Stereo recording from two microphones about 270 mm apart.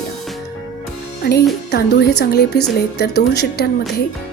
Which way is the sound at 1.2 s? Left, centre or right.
Left.